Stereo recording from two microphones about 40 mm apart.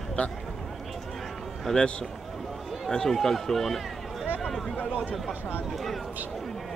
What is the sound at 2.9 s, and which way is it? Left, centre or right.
Speech, centre.